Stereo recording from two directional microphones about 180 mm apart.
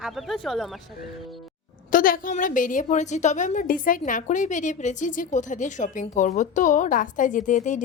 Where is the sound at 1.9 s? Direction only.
50° left (ahead or behind).